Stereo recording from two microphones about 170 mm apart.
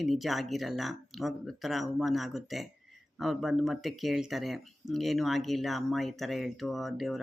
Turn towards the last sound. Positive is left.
turn(degrees=0)  # may be behind; listen again after turning